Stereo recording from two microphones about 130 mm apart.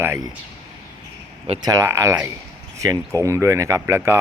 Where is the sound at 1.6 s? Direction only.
25° right (ahead or behind).